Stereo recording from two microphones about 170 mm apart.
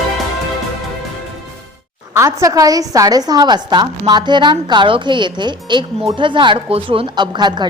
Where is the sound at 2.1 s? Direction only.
20° right (ahead or behind).